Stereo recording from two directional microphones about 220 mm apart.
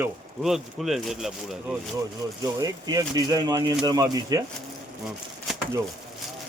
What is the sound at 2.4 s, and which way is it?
Speech, 15° right (ahead or behind).